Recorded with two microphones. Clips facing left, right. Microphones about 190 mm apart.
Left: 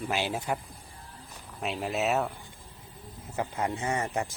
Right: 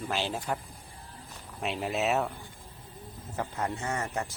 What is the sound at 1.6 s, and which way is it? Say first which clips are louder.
Speech: even; centre (ahead or behind).